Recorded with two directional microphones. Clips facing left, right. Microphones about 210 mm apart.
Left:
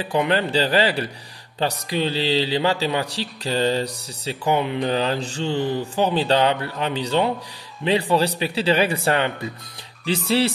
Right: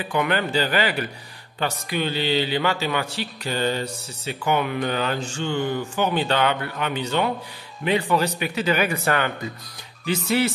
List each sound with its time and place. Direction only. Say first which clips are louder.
0.0 s a man's voice: left 2 dB; 30° left (ahead or behind)